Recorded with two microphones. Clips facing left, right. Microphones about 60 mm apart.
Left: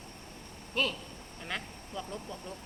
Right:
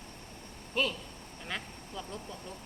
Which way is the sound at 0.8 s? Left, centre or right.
Centre.